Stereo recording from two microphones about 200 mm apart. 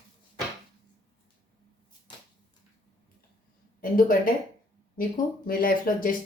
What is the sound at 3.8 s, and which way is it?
Speech, 45° left (ahead or behind).